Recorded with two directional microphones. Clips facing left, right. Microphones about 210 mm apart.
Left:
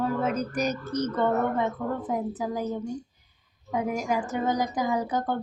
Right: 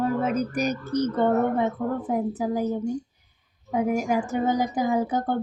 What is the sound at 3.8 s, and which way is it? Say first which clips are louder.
Speech: right 4 dB; 10° right (ahead or behind).